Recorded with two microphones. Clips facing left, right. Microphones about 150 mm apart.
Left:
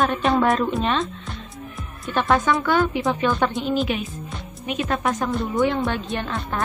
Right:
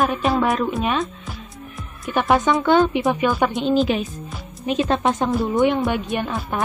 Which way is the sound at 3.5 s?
25° right (ahead or behind).